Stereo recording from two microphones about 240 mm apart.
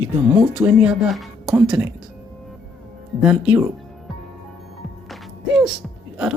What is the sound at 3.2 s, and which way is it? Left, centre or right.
Speech, centre.